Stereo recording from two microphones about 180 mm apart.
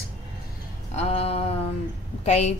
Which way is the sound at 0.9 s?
35° left (ahead or behind).